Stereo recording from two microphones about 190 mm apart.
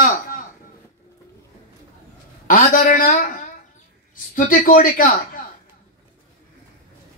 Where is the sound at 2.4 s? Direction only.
45° left (ahead or behind).